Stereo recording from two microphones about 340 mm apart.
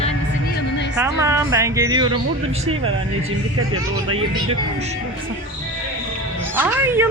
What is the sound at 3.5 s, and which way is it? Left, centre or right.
Speech, right.